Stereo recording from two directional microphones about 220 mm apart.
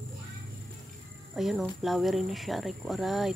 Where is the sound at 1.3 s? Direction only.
Centre (ahead or behind).